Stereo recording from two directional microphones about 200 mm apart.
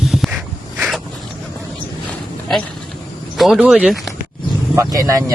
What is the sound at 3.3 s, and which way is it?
Speech, centre (ahead or behind).